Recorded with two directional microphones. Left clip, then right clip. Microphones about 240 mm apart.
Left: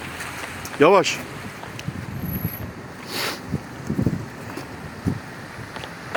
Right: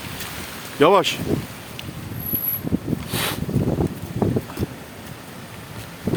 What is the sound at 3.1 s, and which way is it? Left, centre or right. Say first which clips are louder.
Boat: even; centre.